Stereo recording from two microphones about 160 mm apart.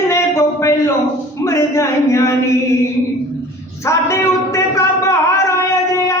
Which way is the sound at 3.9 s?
15° left (ahead or behind).